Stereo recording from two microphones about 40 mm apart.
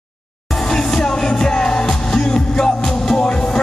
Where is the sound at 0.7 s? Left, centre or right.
Centre.